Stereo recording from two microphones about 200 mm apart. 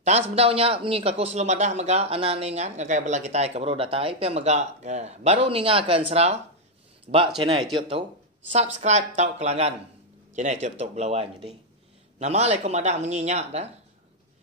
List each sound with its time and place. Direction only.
0.0 s a man's voice: 30° right (ahead or behind)